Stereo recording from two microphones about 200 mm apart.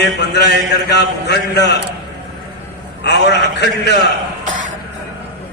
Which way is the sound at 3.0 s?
55° left (ahead or behind).